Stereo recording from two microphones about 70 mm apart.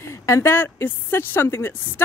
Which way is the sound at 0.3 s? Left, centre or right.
Left.